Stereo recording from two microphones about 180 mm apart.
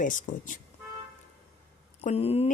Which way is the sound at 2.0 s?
35° left (ahead or behind).